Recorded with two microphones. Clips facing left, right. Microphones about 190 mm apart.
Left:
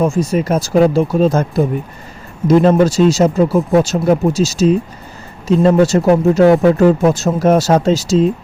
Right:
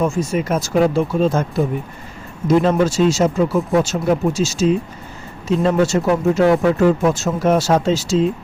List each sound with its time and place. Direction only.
0.0 s speech: 35° left (ahead or behind)